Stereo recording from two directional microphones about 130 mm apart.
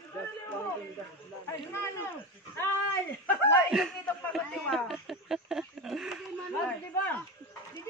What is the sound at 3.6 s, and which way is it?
Speech, 5° right (ahead or behind).